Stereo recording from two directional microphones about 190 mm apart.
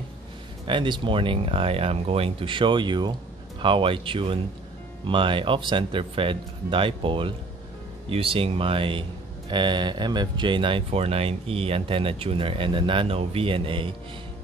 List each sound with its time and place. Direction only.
0.7 s speech: 25° right (ahead or behind)